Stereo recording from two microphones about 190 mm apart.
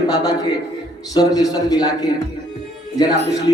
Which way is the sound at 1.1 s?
20° left (ahead or behind).